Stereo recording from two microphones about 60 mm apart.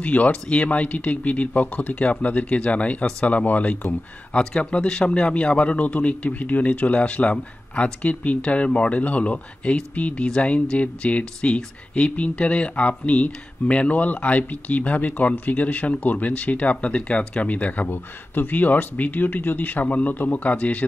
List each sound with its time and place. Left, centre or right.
0.0 s speech: left
3.8 s speech: centre
17.8 s speech: left